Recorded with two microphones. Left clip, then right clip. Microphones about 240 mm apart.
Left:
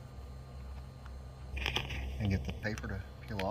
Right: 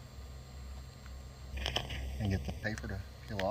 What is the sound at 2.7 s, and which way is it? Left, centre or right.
Speech, centre.